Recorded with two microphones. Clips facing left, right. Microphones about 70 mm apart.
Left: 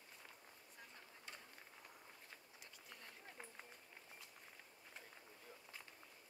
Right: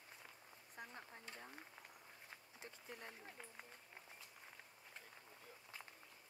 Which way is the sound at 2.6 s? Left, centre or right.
Right.